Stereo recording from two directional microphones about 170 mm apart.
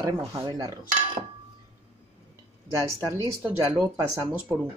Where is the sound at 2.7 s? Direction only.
20° right (ahead or behind).